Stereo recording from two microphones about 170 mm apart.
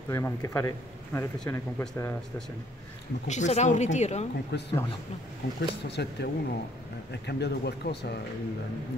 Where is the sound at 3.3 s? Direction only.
45° left (ahead or behind).